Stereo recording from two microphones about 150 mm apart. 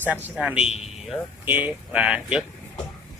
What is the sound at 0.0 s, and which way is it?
Speech, 10° right (ahead or behind).